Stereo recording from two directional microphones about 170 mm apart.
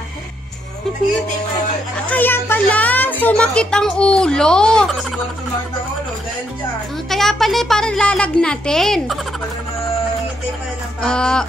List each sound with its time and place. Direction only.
2.0 s a woman's voice: 10° left (ahead or behind)
7.1 s speech: centre (ahead or behind)
11.0 s speech: 5° left (ahead or behind)